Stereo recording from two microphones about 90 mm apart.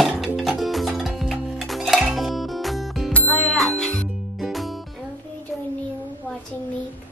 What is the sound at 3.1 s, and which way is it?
Music, 15° left (ahead or behind).